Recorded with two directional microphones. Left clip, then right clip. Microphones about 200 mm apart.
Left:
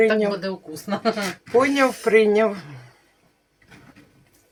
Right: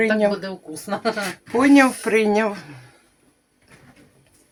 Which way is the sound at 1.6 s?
40° right (ahead or behind).